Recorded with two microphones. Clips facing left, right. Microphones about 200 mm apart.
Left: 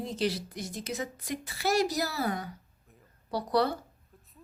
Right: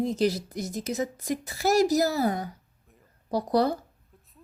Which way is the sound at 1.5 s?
40° right (ahead or behind).